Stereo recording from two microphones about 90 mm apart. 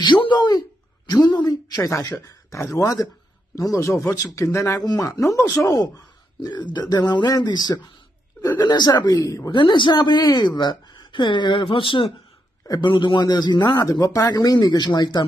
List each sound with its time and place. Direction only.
0.0 s a man's voice: 60° left (ahead or behind); by 4.8 s 30° left (ahead or behind)
4.8 s speech: 45° left (ahead or behind)
5.2 s a man's voice: 30° left (ahead or behind)
6.4 s speech: 55° left (ahead or behind); by 9.5 s 40° left (ahead or behind)
9.5 s a woman's voice: 65° left (ahead or behind)
12.6 s speech: 55° left (ahead or behind)